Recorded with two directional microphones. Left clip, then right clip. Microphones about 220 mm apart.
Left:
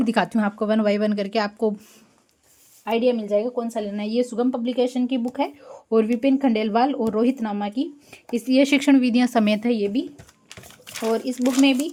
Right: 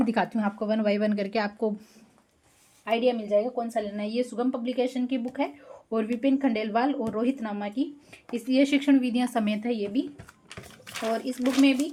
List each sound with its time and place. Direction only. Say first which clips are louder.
0.0 s speech: left 5 dB; 30° left (ahead or behind)
2.8 s a woman's voice: left 4 dB; 45° left (ahead or behind)
11.6 s a woman's voice: left 3 dB; 45° left (ahead or behind)